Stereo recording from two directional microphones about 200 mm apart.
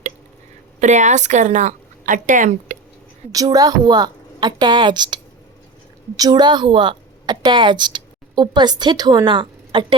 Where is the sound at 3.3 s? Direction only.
20° right (ahead or behind).